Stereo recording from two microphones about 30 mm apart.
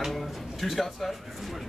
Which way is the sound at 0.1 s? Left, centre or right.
Centre.